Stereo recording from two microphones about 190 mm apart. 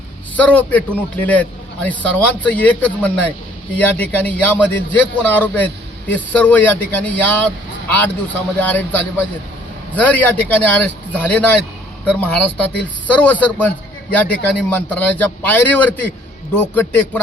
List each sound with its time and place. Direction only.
0.3 s a man's voice: 5° left (ahead or behind)